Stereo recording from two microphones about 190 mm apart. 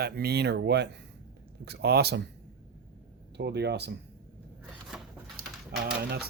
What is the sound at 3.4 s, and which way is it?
Speech, 60° right (ahead or behind).